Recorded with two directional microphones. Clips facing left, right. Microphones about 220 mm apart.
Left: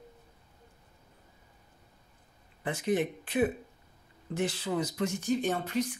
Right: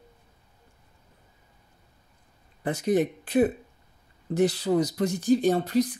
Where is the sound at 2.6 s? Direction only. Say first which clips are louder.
Right 5 dB; 40° right (ahead or behind).